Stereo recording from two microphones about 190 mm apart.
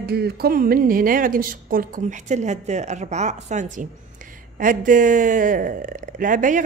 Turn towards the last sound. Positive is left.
turn(degrees=-45)  # may be behind; listen again after turning